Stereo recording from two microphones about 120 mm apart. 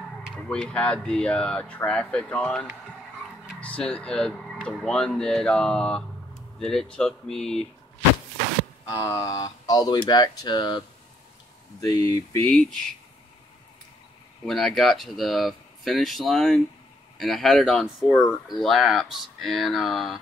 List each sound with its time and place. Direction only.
0.4 s speech: 5° left (ahead or behind)
3.6 s speech: 10° left (ahead or behind)
8.8 s speech: 25° left (ahead or behind)
11.8 s speech: 30° left (ahead or behind)
12.4 s speech: 5° left (ahead or behind)
14.4 s speech: 5° left (ahead or behind)